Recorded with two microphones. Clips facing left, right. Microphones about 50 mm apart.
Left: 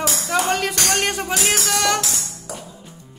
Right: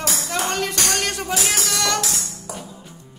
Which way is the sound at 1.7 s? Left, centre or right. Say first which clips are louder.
Left 5 dB; centre.